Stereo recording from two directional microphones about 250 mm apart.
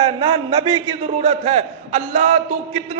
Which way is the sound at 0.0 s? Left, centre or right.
Right.